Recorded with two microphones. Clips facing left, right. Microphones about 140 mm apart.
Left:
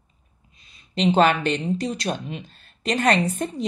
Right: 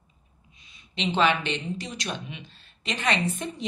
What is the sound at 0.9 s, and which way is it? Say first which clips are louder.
Speech: left 6 dB; 40° left (ahead or behind).